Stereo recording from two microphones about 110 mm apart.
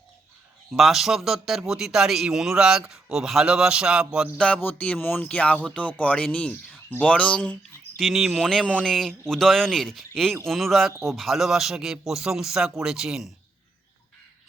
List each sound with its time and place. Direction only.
0.7 s speech: centre (ahead or behind)
4.4 s speech: 10° left (ahead or behind)
7.9 s speech: centre (ahead or behind)